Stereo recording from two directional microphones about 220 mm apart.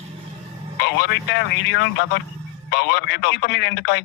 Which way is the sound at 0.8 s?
50° left (ahead or behind).